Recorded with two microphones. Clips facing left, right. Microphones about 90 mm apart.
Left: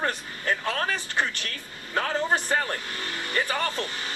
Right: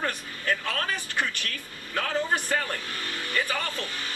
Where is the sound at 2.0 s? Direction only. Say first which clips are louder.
Left 2 dB; 25° left (ahead or behind).